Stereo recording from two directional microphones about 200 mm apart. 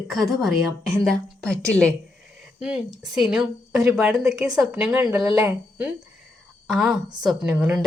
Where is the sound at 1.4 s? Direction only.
5° left (ahead or behind).